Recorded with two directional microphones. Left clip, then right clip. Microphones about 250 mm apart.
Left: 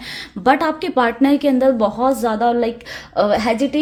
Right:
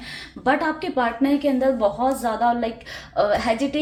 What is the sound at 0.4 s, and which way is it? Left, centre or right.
A woman's voice, left.